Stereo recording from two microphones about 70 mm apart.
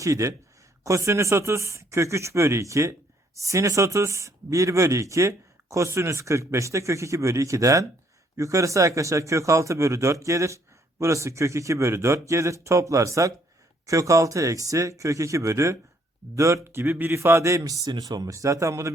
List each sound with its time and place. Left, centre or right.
0.0 s a man's voice: right
17.9 s speech: right